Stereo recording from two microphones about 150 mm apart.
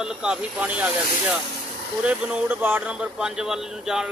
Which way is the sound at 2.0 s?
10° right (ahead or behind).